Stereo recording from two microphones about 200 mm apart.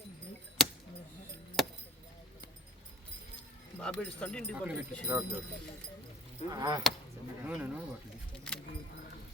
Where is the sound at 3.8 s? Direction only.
5° left (ahead or behind).